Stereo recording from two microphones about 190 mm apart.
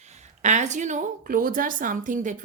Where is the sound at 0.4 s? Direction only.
40° right (ahead or behind).